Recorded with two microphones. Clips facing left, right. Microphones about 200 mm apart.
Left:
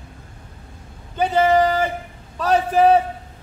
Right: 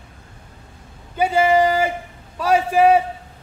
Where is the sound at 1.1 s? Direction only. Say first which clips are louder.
Even; 10° right (ahead or behind).